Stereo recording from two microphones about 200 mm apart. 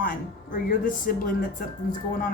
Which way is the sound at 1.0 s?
45° left (ahead or behind).